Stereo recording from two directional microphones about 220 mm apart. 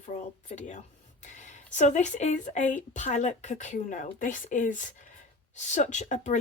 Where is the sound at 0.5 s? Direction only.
35° left (ahead or behind).